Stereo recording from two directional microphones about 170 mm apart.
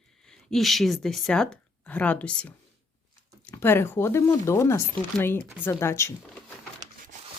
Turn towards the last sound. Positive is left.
turn(degrees=15)  # may be behind; listen again after turning